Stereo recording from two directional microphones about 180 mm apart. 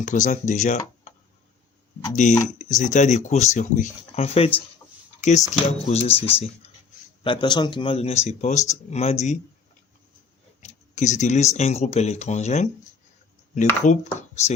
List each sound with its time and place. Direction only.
0.0 s speech: 45° left (ahead or behind)
2.2 s speech: 45° left (ahead or behind)
10.6 s speech: 40° left (ahead or behind)
13.8 s speech: 40° left (ahead or behind)